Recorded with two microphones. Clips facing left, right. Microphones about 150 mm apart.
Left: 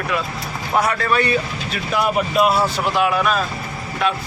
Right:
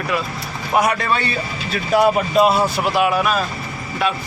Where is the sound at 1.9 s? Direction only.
35° right (ahead or behind).